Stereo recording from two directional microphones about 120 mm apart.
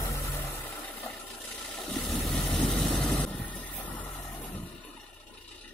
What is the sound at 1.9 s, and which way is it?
Vehicle, centre (ahead or behind).